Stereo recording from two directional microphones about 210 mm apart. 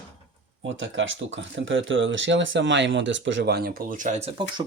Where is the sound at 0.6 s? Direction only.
65° right (ahead or behind).